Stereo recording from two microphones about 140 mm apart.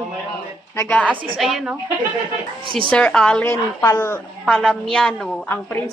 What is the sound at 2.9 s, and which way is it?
Speech, 5° left (ahead or behind).